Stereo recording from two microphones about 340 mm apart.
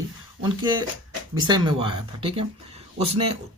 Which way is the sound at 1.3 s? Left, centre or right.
Centre.